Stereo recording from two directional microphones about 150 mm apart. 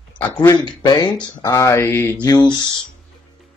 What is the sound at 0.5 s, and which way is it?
Speech, 30° left (ahead or behind).